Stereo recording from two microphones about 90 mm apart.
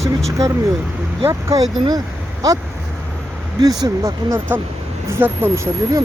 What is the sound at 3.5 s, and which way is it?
Speech, 45° right (ahead or behind).